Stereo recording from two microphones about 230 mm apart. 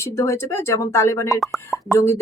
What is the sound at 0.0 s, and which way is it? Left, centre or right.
Speech, centre.